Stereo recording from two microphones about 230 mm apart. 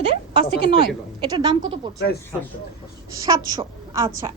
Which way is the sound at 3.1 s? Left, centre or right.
Centre.